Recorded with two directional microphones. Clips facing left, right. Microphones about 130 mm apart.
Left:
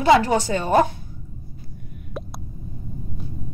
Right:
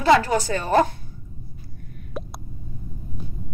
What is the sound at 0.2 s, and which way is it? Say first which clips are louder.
Speech: left 2 dB; 25° left (ahead or behind).